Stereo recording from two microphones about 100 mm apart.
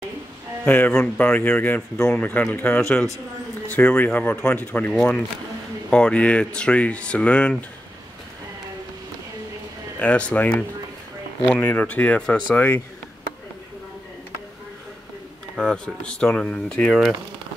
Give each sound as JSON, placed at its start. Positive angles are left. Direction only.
{"t": 0.7, "sound": "speech", "side_deg": 15}
{"t": 2.8, "sound": "speech", "side_deg": 5}
{"t": 9.9, "sound": "speech", "side_deg": 10}
{"t": 15.5, "sound": "speech", "side_deg": 10}